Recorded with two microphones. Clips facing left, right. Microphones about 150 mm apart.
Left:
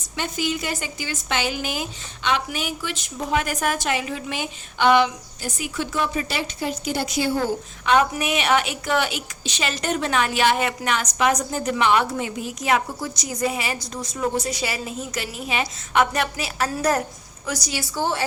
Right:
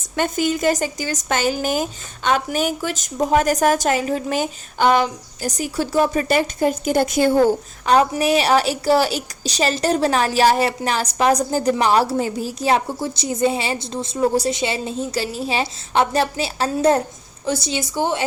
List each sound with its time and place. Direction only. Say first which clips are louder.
0.2 s a woman's voice: right 7 dB; 45° right (ahead or behind); by 18.2 s 20° right (ahead or behind)